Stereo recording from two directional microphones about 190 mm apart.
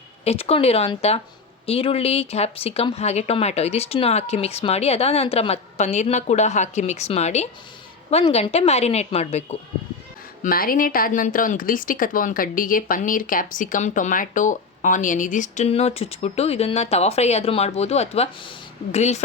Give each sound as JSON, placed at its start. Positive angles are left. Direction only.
{"t": 0.3, "sound": "speech", "side_deg": 30}
{"t": 10.4, "sound": "speech", "side_deg": 50}